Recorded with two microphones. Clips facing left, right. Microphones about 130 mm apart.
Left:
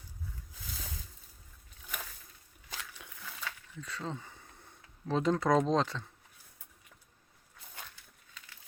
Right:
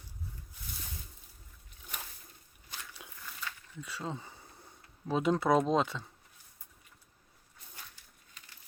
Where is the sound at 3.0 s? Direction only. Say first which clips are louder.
Right 1 dB; 20° right (ahead or behind).